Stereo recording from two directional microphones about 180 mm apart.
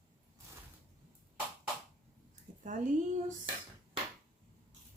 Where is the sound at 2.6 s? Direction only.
45° right (ahead or behind).